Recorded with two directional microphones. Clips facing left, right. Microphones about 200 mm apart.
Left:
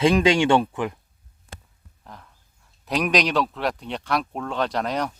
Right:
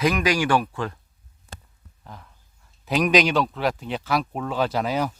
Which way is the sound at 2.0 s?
Centre (ahead or behind).